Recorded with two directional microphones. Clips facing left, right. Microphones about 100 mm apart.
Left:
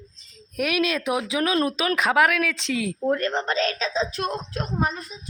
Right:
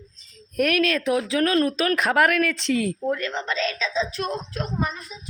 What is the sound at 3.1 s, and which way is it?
A woman's voice, 40° left (ahead or behind).